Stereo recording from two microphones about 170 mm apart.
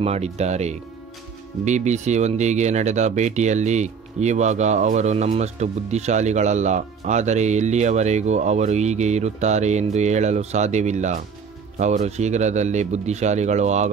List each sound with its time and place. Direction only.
0.0 s speech: 40° right (ahead or behind)